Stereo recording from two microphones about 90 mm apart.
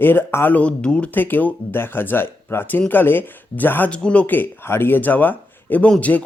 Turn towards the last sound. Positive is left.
turn(degrees=15)  # may be behind; listen again after turning